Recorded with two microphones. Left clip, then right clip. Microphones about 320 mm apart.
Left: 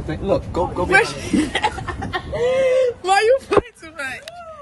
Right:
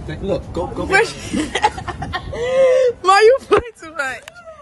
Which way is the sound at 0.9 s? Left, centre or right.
Centre.